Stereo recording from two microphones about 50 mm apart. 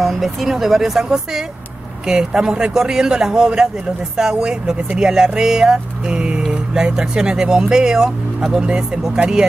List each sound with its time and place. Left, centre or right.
0.0 s speech: centre